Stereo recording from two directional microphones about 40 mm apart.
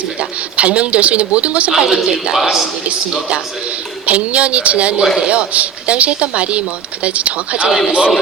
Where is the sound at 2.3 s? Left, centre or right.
Centre.